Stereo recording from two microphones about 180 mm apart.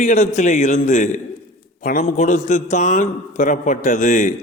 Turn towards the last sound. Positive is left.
turn(degrees=45)  # may be behind; listen again after turning